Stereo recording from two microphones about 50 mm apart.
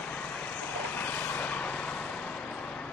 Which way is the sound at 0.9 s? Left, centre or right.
Left.